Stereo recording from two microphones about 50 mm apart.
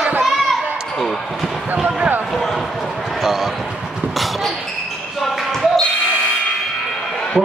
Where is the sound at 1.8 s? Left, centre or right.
Centre.